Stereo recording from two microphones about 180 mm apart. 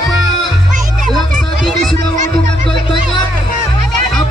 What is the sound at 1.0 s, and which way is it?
Music, centre (ahead or behind).